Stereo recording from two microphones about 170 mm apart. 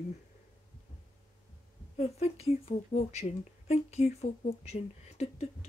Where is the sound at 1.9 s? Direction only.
35° left (ahead or behind).